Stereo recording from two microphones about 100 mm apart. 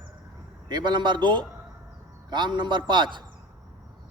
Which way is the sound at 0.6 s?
50° right (ahead or behind).